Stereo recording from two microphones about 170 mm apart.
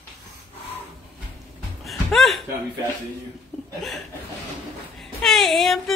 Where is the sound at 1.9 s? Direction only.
Centre (ahead or behind).